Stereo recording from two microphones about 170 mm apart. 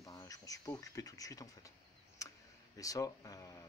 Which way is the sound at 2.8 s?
20° left (ahead or behind).